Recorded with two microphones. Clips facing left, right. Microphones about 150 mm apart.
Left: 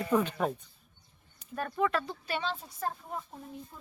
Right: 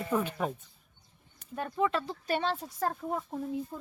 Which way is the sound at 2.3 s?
50° right (ahead or behind).